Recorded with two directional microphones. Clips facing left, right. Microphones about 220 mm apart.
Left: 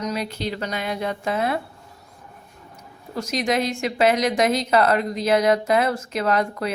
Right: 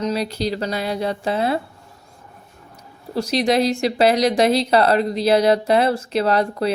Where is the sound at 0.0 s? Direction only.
30° right (ahead or behind).